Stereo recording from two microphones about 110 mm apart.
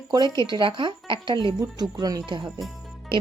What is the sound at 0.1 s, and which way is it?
Speech, 40° right (ahead or behind).